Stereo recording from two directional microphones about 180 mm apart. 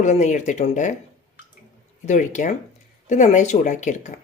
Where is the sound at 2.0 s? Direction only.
45° left (ahead or behind).